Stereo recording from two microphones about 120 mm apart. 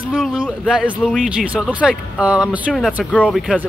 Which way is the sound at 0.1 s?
5° right (ahead or behind).